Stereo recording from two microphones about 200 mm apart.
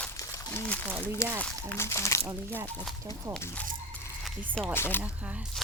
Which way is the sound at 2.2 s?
10° right (ahead or behind).